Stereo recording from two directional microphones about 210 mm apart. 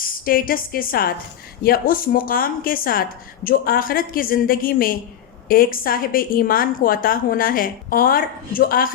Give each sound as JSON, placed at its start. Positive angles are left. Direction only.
{"t": 0.0, "sound": "a woman's voice", "side_deg": 45}